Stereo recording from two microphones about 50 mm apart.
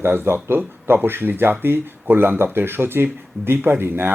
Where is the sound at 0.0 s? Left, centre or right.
Right.